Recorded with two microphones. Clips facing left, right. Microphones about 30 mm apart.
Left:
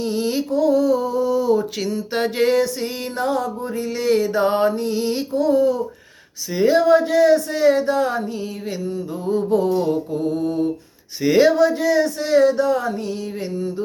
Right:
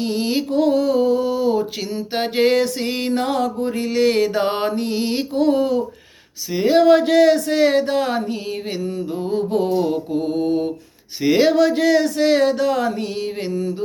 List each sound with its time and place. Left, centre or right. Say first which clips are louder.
0.0 s a sound: right 1 dB; right
0.5 s a sound: even; right
2.1 s mantra: right 2 dB; right
2.5 s mantra: even; right
6.7 s speech: right 4 dB; right
9.2 s mantra: left 2 dB; right
11.2 s speech: left 1 dB; right
11.5 s speech: right 1 dB; right
13.5 s a sound: right 2 dB; right